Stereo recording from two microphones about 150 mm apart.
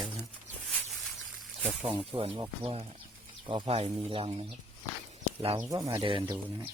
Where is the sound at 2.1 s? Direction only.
40° right (ahead or behind).